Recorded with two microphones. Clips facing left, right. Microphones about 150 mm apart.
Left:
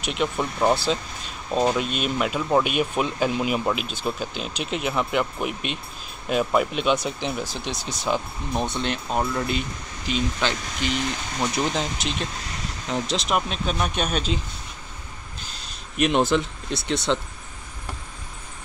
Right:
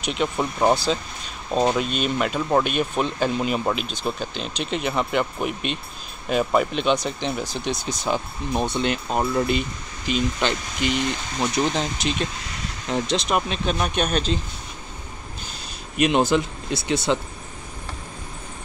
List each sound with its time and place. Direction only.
0.0 s speech: centre (ahead or behind)
1.8 s speech: centre (ahead or behind)
16.0 s speech: centre (ahead or behind)